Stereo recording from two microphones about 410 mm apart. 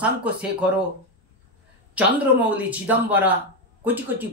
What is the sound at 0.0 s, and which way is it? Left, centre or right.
Speech, centre.